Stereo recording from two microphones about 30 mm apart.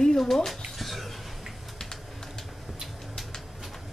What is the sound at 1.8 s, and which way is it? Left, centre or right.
Typing, left.